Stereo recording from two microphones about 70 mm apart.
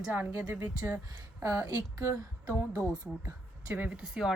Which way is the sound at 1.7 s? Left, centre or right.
Right.